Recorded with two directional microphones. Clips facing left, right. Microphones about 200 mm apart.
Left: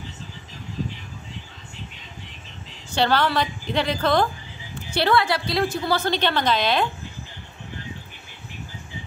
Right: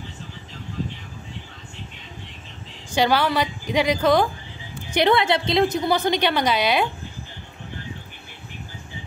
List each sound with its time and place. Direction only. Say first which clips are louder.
2.9 s a woman's voice: right 1 dB; 10° right (ahead or behind)